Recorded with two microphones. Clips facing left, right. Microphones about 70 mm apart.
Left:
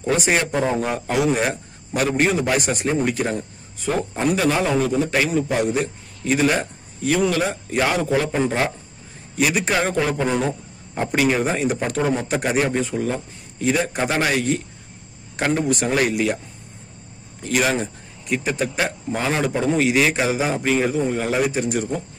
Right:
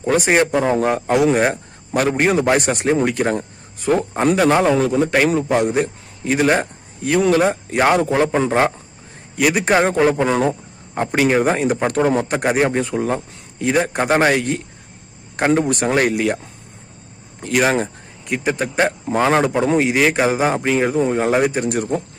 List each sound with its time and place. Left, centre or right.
0.0 s a man's voice: right
17.4 s speech: right
19.5 s a man's voice: right
19.8 s a man's voice: right